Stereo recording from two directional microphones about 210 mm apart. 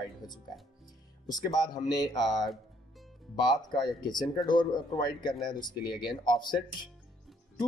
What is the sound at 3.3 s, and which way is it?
Speech, 20° left (ahead or behind).